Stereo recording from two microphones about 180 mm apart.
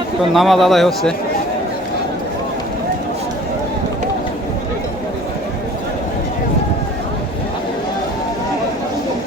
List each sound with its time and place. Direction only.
0.3 s a man's voice: centre (ahead or behind)